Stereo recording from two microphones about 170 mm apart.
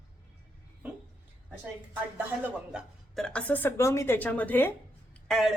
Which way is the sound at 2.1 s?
10° right (ahead or behind).